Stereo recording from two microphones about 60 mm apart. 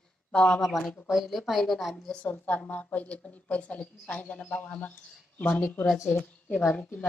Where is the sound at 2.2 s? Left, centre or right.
Left.